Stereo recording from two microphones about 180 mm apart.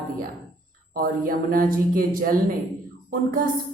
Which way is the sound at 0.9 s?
50° right (ahead or behind).